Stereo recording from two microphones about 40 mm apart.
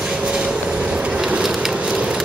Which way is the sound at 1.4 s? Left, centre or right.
Centre.